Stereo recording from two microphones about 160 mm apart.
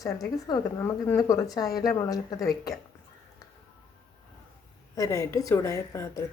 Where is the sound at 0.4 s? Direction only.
25° left (ahead or behind).